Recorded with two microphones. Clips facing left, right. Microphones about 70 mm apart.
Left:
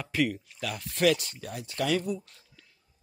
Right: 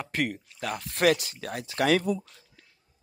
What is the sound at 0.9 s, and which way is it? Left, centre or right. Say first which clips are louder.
Speech: right 1 dB; right.